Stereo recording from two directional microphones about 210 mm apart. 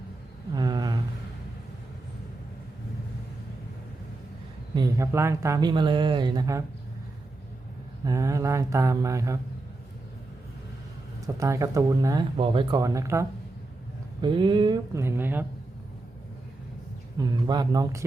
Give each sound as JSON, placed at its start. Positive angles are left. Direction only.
{"t": 0.5, "sound": "a sound", "side_deg": -20}
{"t": 4.7, "sound": "speech", "side_deg": -15}
{"t": 8.0, "sound": "speech", "side_deg": -15}
{"t": 11.3, "sound": "speech", "side_deg": -15}
{"t": 17.2, "sound": "speech", "side_deg": -20}